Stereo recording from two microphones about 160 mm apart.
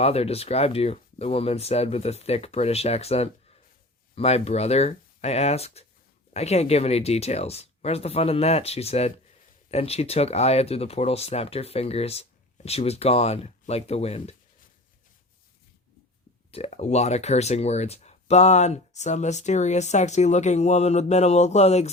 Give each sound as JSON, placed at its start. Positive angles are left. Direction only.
{"t": 0.0, "sound": "speech", "side_deg": 40}
{"t": 16.5, "sound": "speech", "side_deg": 40}